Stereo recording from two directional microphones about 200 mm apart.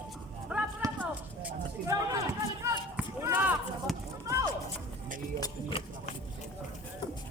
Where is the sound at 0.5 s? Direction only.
5° right (ahead or behind).